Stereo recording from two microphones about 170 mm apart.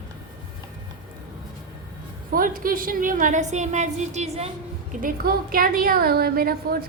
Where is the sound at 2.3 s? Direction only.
55° right (ahead or behind); by 4.5 s 40° right (ahead or behind).